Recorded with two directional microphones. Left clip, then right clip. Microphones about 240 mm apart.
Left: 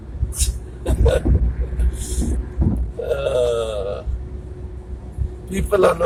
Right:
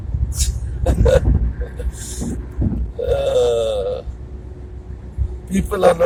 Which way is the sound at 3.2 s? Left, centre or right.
Centre.